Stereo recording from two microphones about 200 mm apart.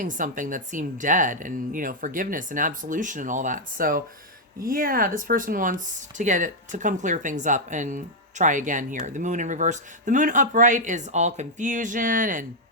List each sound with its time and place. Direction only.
0.0 s speech: 40° right (ahead or behind)